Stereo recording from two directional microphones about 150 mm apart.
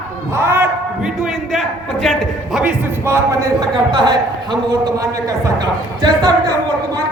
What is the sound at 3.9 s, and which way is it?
A man's voice, 30° right (ahead or behind).